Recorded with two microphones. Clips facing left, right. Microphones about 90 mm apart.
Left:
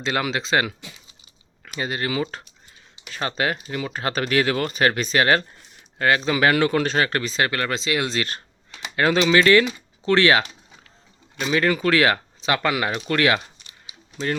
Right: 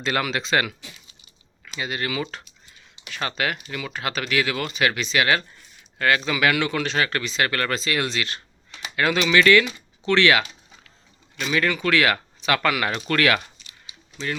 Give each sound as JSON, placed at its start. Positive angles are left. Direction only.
{"t": 0.0, "sound": "speech", "side_deg": 25}
{"t": 1.6, "sound": "a sound", "side_deg": 45}
{"t": 1.9, "sound": "speech", "side_deg": 30}
{"t": 7.5, "sound": "speech", "side_deg": 20}
{"t": 8.1, "sound": "speech", "side_deg": 40}